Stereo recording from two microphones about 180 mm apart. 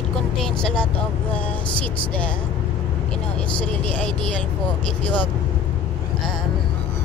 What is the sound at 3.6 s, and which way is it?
Speech, 5° left (ahead or behind).